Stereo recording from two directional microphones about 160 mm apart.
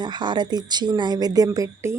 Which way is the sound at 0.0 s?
30° right (ahead or behind).